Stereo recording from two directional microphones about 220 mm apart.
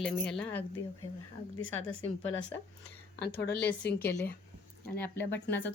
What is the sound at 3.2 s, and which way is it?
Speech, 45° left (ahead or behind).